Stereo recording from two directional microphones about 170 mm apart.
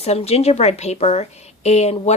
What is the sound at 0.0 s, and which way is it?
Speech, 40° left (ahead or behind).